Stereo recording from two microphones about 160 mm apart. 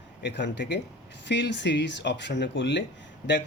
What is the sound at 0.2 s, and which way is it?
Speech, 90° left.